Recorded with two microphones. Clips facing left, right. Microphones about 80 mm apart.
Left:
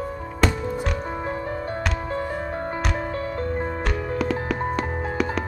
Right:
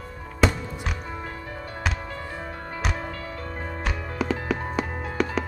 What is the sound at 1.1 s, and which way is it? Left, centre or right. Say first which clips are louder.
Music: left 7 dB; left.